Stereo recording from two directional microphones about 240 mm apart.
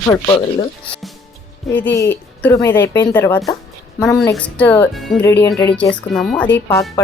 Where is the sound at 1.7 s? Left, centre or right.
Centre.